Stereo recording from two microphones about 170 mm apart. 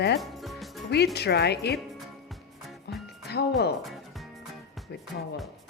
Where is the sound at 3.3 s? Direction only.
70° left (ahead or behind).